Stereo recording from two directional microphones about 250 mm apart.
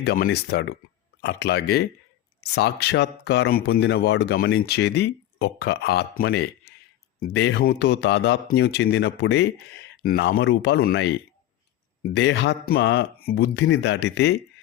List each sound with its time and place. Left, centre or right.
0.0 s speech: left